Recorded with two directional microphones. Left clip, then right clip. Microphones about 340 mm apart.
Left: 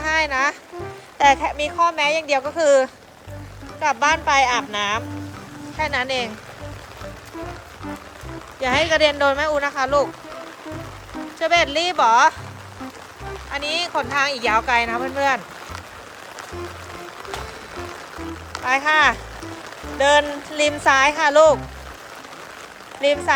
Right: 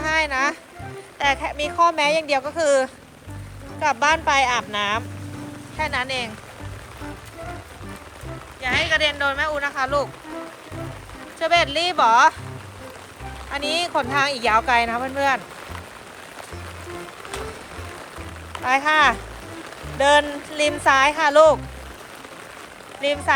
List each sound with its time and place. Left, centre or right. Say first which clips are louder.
0.0 s music: left 1 dB; centre
1.2 s speech: left 5 dB; centre
8.9 s speech: left 3 dB; centre
11.3 s speech: left 1 dB; centre
13.5 s speech: right 1 dB; centre
18.6 s speech: left 1 dB; centre
23.0 s speech: left 4 dB; centre